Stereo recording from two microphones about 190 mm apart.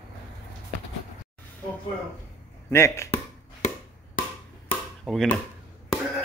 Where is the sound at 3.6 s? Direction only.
40° left (ahead or behind).